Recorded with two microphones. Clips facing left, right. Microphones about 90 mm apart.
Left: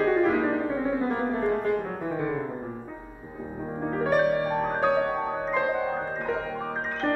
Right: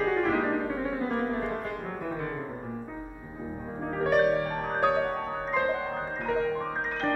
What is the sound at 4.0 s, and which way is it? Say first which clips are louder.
Music: even; 5° left (ahead or behind).